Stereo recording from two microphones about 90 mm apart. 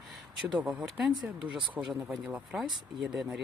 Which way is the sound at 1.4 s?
15° right (ahead or behind).